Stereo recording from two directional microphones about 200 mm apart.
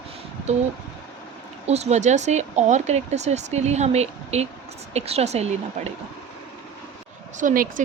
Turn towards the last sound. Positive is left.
turn(degrees=-40)  # may be behind; listen again after turning